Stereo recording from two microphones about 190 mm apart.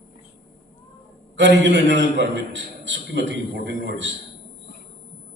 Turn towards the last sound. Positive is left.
turn(degrees=-70)  # may be behind; listen again after turning